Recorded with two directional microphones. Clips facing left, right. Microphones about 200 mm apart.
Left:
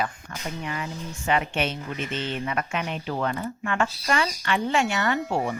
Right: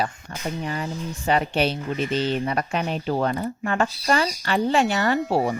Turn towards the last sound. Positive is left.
turn(degrees=-35)  # may be behind; listen again after turning